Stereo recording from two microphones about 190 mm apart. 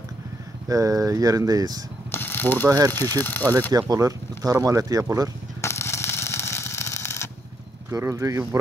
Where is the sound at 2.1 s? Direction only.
10° left (ahead or behind).